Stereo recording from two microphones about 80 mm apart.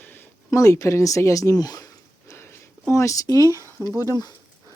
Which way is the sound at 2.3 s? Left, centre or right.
Left.